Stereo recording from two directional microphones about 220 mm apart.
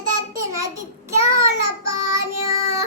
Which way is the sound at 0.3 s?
15° right (ahead or behind).